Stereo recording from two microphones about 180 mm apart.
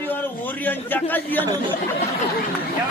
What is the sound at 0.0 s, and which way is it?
A man's voice, 10° left (ahead or behind).